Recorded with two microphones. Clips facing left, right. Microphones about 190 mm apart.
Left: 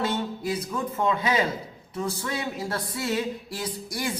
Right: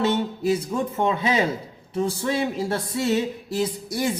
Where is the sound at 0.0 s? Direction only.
25° right (ahead or behind).